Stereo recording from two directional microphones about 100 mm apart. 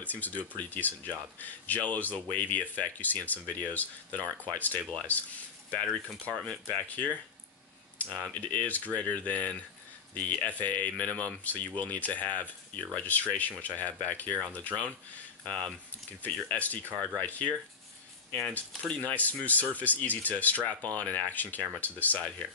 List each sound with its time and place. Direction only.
0.0 s speech: 15° left (ahead or behind)
6.3 s speech: 10° left (ahead or behind)
18.7 s speech: 10° left (ahead or behind)